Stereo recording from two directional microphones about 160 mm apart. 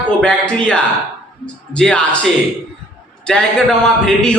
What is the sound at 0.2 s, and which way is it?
A man's voice, 5° left (ahead or behind).